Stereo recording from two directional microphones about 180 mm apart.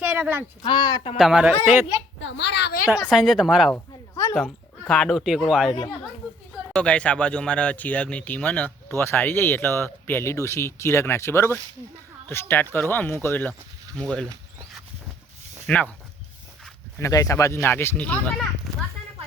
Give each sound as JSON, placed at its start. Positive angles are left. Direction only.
{"t": 0.0, "sound": "a sound", "side_deg": -10}
{"t": 0.6, "sound": "speech", "side_deg": 25}
{"t": 1.1, "sound": "a woman's voice", "side_deg": -5}
{"t": 2.2, "sound": "a woman's voice", "side_deg": 70}
{"t": 3.0, "sound": "speech", "side_deg": 0}
{"t": 3.8, "sound": "a sound", "side_deg": 20}
{"t": 4.4, "sound": "speech", "side_deg": 0}
{"t": 6.7, "sound": "speech", "side_deg": 5}
{"t": 15.6, "sound": "speech", "side_deg": 5}
{"t": 17.0, "sound": "speech", "side_deg": 20}